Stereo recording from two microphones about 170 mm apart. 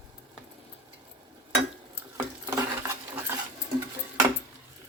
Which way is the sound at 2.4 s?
15° right (ahead or behind).